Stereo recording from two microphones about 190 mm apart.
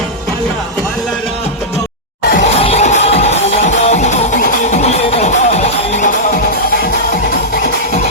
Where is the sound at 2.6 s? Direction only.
35° left (ahead or behind).